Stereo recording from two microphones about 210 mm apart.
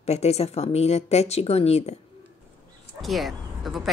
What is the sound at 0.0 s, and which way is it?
Speech, 30° left (ahead or behind).